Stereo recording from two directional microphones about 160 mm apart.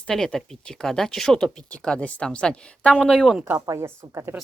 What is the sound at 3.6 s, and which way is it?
Speech, 20° right (ahead or behind).